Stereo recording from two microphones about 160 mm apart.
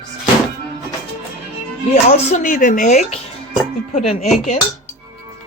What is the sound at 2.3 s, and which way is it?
Music, 55° left (ahead or behind).